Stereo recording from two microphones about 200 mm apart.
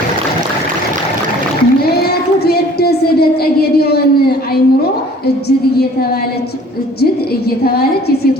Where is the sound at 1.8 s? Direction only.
50° left (ahead or behind).